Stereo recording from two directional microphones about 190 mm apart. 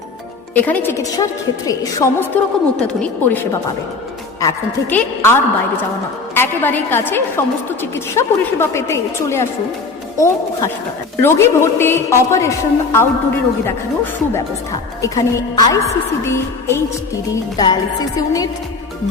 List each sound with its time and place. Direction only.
0.5 s a woman's voice: 10° left (ahead or behind)
15.0 s a woman's voice: 20° left (ahead or behind)
17.3 s music: 20° left (ahead or behind)